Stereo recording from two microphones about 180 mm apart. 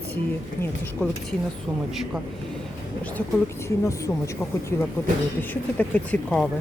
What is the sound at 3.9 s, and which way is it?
Speech, 15° left (ahead or behind).